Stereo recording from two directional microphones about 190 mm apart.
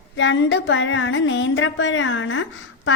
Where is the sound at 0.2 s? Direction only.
70° left (ahead or behind).